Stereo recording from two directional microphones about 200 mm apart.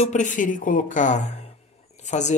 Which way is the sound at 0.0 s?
40° left (ahead or behind).